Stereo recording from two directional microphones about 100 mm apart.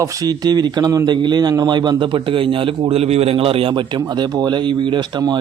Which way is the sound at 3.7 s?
45° right (ahead or behind).